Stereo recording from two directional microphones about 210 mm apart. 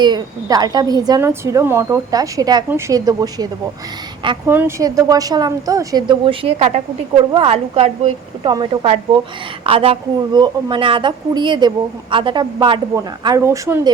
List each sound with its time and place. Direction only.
0.0 s a woman's voice: 20° right (ahead or behind)